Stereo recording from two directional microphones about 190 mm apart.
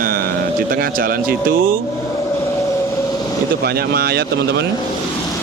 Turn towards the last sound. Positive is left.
turn(degrees=-60)  # may be behind; listen again after turning